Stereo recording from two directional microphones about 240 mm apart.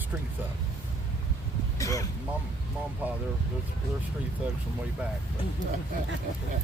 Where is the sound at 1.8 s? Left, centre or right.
Centre.